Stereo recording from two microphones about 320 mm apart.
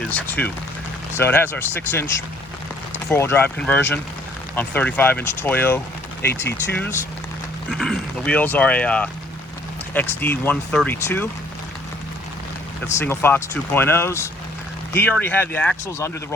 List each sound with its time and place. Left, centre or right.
0.1 s speech: centre
3.1 s speech: centre
6.3 s speech: left
7.7 s speech: centre
13.1 s speech: centre